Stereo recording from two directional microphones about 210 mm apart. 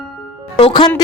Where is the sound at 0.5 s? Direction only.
20° left (ahead or behind).